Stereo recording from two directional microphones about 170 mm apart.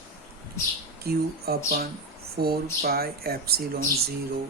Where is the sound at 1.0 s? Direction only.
65° right (ahead or behind).